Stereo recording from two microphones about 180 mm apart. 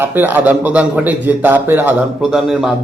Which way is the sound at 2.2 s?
Centre (ahead or behind).